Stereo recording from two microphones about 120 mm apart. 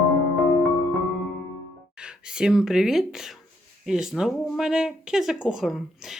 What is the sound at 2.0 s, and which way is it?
Speech, 5° right (ahead or behind).